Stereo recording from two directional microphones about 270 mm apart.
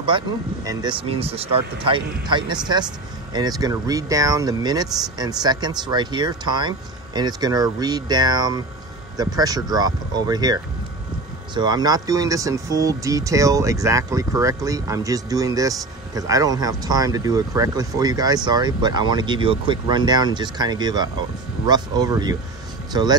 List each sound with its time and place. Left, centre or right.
0.7 s speech: centre